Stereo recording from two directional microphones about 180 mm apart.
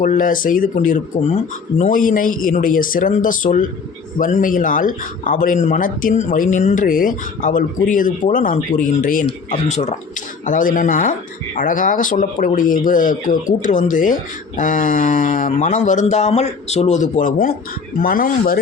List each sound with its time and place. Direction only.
0.0 s speech: 50° left (ahead or behind)